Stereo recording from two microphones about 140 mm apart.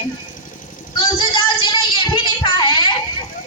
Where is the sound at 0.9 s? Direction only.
35° left (ahead or behind).